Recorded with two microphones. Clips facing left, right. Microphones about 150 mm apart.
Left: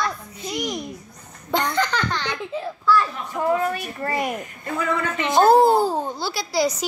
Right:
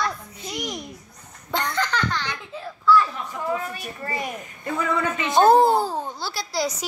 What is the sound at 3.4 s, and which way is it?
A woman's voice, 45° left (ahead or behind).